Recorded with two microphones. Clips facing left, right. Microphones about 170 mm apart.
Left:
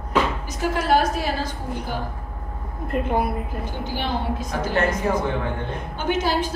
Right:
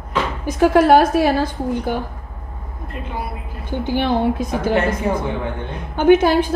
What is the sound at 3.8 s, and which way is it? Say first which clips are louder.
Speech: right 10 dB; 55° right (ahead or behind).